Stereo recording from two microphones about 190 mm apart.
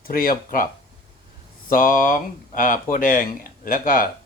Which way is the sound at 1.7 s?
45° left (ahead or behind).